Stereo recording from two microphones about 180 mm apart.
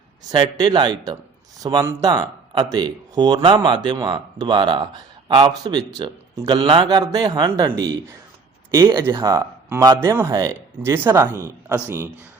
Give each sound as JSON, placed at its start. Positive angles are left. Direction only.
{"t": 0.3, "sound": "a man's voice", "side_deg": -20}